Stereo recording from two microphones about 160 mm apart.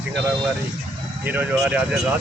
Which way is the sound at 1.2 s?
10° right (ahead or behind).